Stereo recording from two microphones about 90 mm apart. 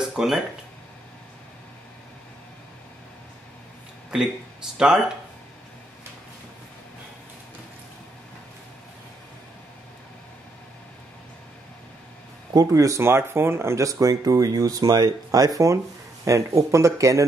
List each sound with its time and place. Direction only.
0.1 s speech: 5° right (ahead or behind)
4.1 s speech: 10° right (ahead or behind)
12.5 s speech: 35° right (ahead or behind)